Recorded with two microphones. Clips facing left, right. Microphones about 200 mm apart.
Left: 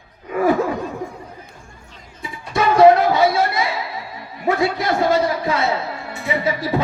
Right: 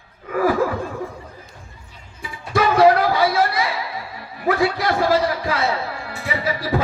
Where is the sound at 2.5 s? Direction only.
25° left (ahead or behind).